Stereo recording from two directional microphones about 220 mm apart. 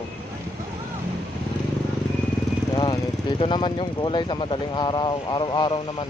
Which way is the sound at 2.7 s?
20° left (ahead or behind).